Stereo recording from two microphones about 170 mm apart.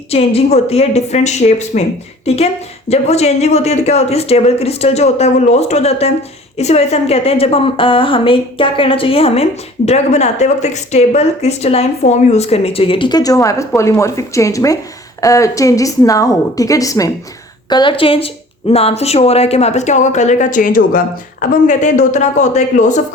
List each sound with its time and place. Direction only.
0.1 s a woman's voice: 35° left (ahead or behind)